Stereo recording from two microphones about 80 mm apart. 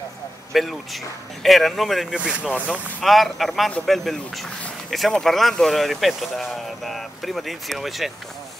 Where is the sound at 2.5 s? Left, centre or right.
Centre.